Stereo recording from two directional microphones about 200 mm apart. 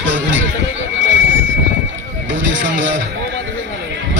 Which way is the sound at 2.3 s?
70° right (ahead or behind).